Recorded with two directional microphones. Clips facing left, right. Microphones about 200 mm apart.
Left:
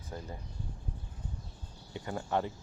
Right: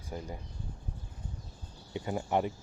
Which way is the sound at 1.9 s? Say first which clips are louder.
Right 3 dB; 20° right (ahead or behind).